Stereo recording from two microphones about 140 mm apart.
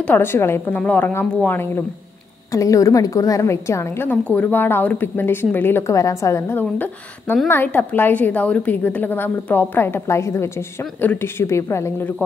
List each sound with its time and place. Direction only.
0.0 s a woman's voice: 15° left (ahead or behind)